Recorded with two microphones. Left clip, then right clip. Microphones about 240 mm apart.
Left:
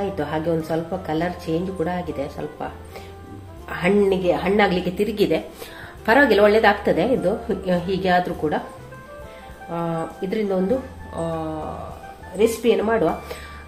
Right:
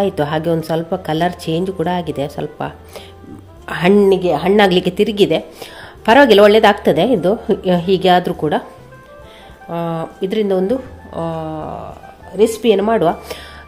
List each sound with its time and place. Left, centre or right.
0.0 s a woman's voice: right
9.7 s a woman's voice: right
12.6 s a woman's voice: right